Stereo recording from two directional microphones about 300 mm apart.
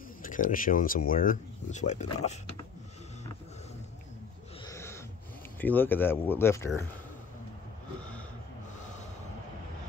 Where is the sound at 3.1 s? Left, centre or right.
Left.